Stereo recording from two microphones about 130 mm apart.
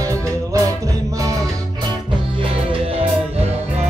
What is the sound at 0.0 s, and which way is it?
Music, 25° right (ahead or behind).